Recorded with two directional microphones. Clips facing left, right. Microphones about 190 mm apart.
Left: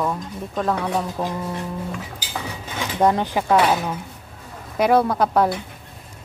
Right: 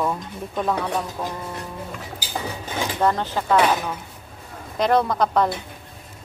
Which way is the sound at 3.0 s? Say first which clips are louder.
Left 4 dB; 15° left (ahead or behind).